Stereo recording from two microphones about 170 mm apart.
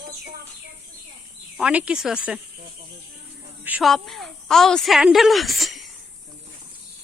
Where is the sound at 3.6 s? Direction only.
10° right (ahead or behind).